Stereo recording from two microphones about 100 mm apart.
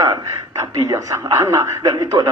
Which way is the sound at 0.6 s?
35° right (ahead or behind).